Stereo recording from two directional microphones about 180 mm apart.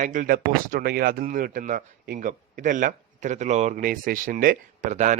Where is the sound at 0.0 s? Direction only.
45° right (ahead or behind).